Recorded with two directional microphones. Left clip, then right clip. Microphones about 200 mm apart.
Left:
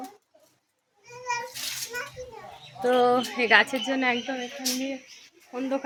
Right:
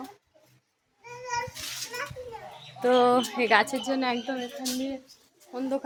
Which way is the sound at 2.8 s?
5° right (ahead or behind).